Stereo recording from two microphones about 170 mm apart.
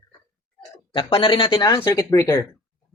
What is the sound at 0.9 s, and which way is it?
Speech, 30° left (ahead or behind).